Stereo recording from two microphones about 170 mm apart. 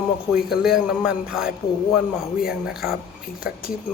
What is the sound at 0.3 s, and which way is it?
A man's voice, 5° right (ahead or behind).